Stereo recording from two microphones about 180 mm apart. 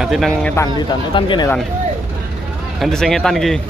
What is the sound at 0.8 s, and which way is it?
Speech, 25° left (ahead or behind).